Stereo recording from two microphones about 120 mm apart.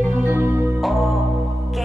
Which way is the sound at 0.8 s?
Centre (ahead or behind).